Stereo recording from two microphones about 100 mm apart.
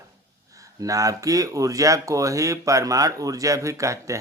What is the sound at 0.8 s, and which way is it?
A man's voice, 35° right (ahead or behind).